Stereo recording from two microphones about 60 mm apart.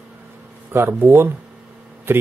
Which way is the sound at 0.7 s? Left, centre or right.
Right.